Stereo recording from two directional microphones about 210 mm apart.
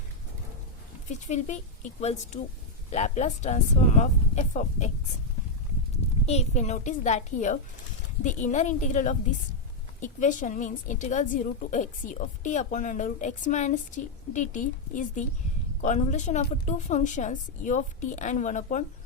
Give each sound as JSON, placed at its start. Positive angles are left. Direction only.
{"t": 1.3, "sound": "a woman's voice", "side_deg": 35}
{"t": 6.2, "sound": "a woman's voice", "side_deg": 30}